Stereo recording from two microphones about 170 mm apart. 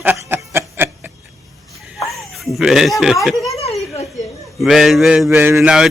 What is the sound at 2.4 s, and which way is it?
Speech, centre (ahead or behind).